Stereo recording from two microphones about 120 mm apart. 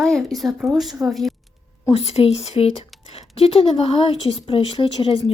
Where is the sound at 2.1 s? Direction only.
55° left (ahead or behind).